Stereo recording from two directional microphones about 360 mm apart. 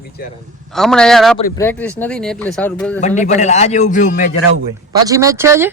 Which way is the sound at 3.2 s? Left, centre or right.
Centre.